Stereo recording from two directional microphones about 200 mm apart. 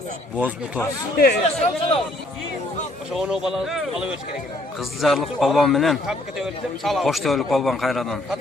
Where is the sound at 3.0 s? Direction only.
5° right (ahead or behind).